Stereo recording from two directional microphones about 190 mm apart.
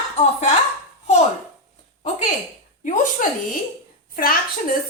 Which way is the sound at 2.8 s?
45° left (ahead or behind).